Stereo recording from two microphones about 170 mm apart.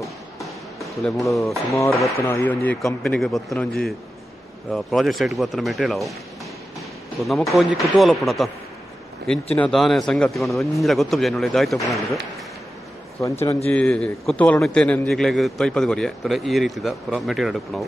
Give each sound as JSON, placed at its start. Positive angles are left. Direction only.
{"t": 1.0, "sound": "a man's voice", "side_deg": 0}
{"t": 7.2, "sound": "a man's voice", "side_deg": 0}
{"t": 9.6, "sound": "a man's voice", "side_deg": 0}
{"t": 13.2, "sound": "a man's voice", "side_deg": 15}
{"t": 13.7, "sound": "a man's voice", "side_deg": 5}